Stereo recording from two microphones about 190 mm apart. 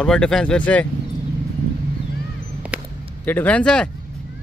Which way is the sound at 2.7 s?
5° right (ahead or behind).